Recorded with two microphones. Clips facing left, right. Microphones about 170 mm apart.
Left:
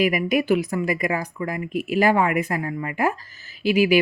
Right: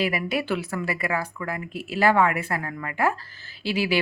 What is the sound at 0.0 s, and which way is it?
Speech, 15° left (ahead or behind).